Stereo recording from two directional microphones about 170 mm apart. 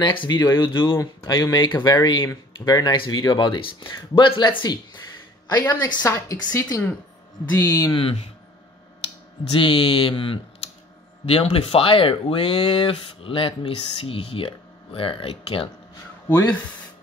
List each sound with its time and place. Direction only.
0.0 s speech: 30° left (ahead or behind)
9.5 s speech: 30° left (ahead or behind)